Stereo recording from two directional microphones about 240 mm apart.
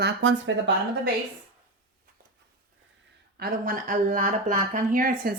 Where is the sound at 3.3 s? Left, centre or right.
Right.